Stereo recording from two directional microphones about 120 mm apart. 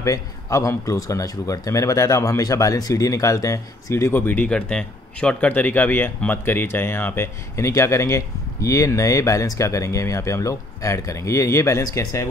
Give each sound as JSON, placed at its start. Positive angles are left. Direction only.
{"t": 0.0, "sound": "speech", "side_deg": 25}